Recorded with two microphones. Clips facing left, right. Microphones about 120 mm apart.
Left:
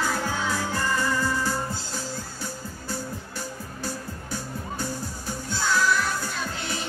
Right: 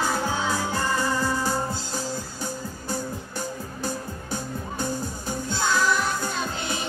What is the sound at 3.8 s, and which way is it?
Music, 20° right (ahead or behind).